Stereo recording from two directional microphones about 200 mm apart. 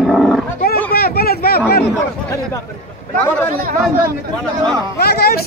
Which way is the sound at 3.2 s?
10° left (ahead or behind).